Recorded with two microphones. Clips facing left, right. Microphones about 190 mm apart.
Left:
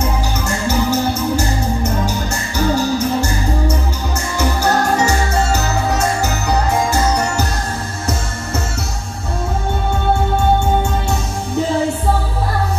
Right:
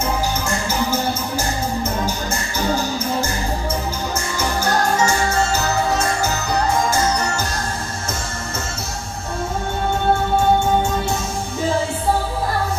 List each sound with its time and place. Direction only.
4.6 s music: 65° left (ahead or behind)